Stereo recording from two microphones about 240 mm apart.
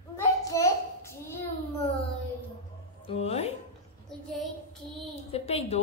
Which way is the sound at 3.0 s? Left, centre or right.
Left.